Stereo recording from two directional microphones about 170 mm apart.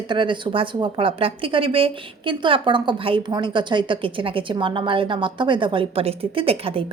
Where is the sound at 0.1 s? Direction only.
30° right (ahead or behind).